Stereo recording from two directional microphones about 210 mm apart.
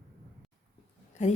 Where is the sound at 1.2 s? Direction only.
35° left (ahead or behind).